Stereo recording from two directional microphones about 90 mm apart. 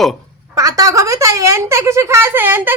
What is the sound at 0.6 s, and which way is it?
Speech, 40° right (ahead or behind).